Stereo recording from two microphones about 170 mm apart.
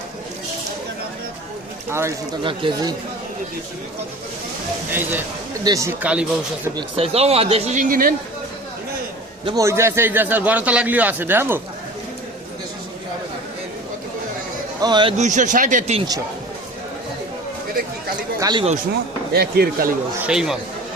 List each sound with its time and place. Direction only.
1.9 s a man's voice: 15° right (ahead or behind)
2.4 s speech: 30° right (ahead or behind)
4.9 s a man's voice: 10° right (ahead or behind)
6.0 s a man's voice: 5° right (ahead or behind)
6.7 s speech: 35° right (ahead or behind); by 8.1 s 55° right (ahead or behind)
9.4 s a man's voice: 25° right (ahead or behind)
14.8 s speech: 25° right (ahead or behind)
15.2 s speech: 50° right (ahead or behind)
18.3 s speech: 20° right (ahead or behind)
19.3 s speech: 65° right (ahead or behind)
20.2 s speech: 5° right (ahead or behind)